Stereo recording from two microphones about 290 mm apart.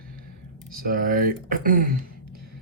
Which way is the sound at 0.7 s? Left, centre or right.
Right.